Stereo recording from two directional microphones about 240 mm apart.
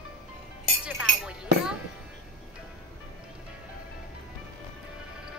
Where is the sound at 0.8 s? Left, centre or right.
Centre.